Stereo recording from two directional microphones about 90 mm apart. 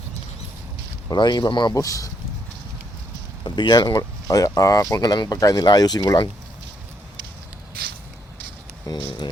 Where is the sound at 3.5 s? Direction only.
55° left (ahead or behind).